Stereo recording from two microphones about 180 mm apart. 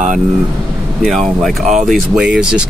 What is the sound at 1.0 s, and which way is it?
Speech, centre (ahead or behind).